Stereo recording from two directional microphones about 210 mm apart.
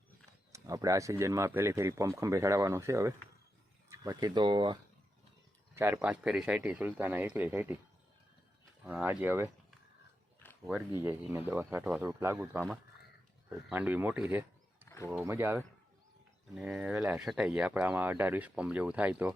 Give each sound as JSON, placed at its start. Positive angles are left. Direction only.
{"t": 0.5, "sound": "speech", "side_deg": -15}
{"t": 5.7, "sound": "speech", "side_deg": -10}
{"t": 8.8, "sound": "speech", "side_deg": -10}
{"t": 10.4, "sound": "a sound", "side_deg": 10}
{"t": 11.0, "sound": "speech", "side_deg": -10}
{"t": 13.7, "sound": "speech", "side_deg": -5}
{"t": 14.8, "sound": "a sound", "side_deg": 15}
{"t": 15.2, "sound": "speech", "side_deg": -10}